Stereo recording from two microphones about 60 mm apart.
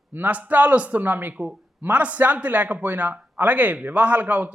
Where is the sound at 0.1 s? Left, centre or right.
Right.